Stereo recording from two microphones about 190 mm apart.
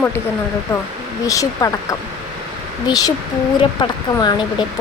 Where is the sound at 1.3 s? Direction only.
20° left (ahead or behind).